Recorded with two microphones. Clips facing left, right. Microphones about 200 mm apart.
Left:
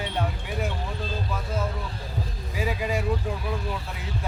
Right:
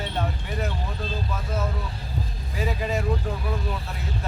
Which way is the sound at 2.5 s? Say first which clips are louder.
Even; 10° left (ahead or behind).